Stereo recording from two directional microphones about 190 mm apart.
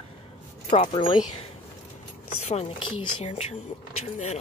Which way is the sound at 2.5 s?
35° left (ahead or behind).